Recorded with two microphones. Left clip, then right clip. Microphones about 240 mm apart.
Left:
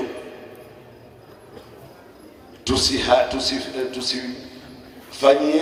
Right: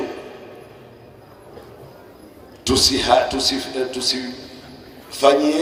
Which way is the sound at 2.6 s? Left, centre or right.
Right.